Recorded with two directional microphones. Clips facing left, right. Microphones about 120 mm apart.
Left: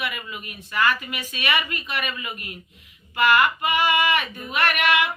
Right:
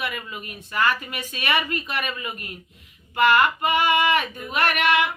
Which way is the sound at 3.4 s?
45° right (ahead or behind).